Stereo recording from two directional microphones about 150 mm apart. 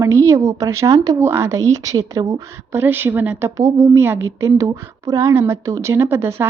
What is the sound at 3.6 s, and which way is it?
A woman's voice, 20° right (ahead or behind).